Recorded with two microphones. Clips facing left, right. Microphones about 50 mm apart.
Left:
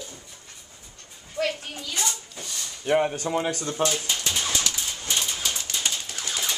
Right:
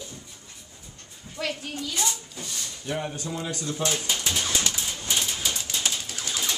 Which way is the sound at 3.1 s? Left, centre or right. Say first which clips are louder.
Left 6 dB; left.